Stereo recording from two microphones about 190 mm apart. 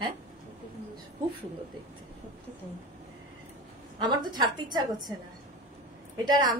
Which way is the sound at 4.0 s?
20° right (ahead or behind).